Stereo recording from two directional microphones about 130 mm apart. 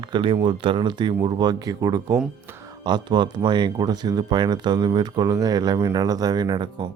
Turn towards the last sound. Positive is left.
turn(degrees=-35)  # may be behind; listen again after turning